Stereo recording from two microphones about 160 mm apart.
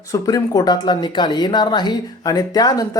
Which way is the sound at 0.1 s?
20° left (ahead or behind).